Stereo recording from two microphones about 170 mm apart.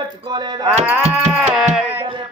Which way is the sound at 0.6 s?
5° right (ahead or behind).